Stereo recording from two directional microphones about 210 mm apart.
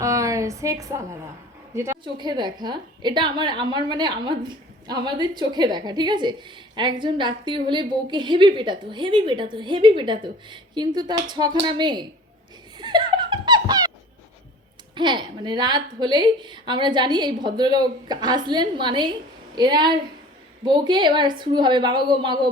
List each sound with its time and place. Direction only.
0.0 s a sound: 15° right (ahead or behind)
1.7 s a woman's voice: 10° right (ahead or behind)
12.7 s laughter: 20° right (ahead or behind)
14.9 s a woman's voice: 20° right (ahead or behind)